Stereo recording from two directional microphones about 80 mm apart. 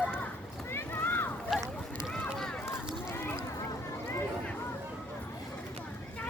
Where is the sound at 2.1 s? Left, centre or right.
Centre.